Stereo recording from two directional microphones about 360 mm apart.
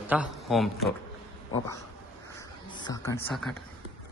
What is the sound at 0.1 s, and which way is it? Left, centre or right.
Speech, centre.